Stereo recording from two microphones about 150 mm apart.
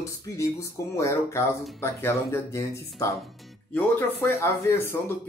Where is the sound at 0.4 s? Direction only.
20° left (ahead or behind).